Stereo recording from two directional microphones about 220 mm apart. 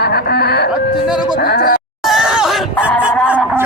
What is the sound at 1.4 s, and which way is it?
Speech, 45° left (ahead or behind).